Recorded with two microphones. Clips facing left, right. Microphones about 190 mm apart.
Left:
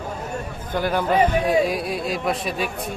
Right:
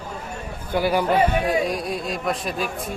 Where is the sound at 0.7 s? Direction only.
10° right (ahead or behind).